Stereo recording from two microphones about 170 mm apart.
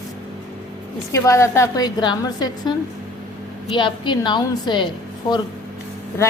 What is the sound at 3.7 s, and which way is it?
A woman's voice, 25° left (ahead or behind).